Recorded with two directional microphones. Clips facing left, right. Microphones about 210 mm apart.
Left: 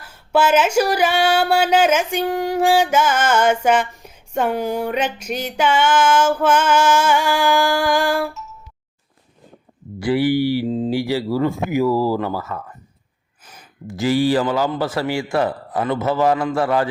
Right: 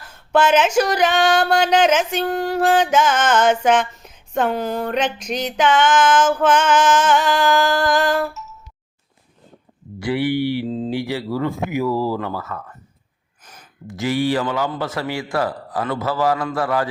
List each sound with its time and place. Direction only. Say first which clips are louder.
0.0 s speech: even; 10° left (ahead or behind)
10.0 s speech: left 3 dB; 35° left (ahead or behind)
13.8 s a man's voice: left 3 dB; 30° left (ahead or behind)